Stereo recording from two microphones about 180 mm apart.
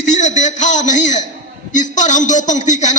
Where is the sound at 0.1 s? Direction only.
40° left (ahead or behind).